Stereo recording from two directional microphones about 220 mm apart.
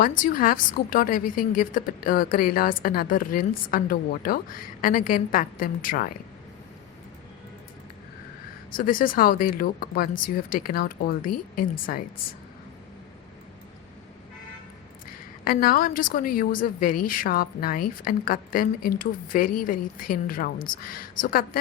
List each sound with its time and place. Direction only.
0.0 s a woman's voice: 40° left (ahead or behind)
8.7 s a woman's voice: 40° left (ahead or behind)
15.4 s a woman's voice: 40° left (ahead or behind)